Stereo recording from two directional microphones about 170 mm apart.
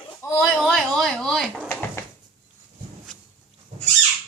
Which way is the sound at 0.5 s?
5° left (ahead or behind).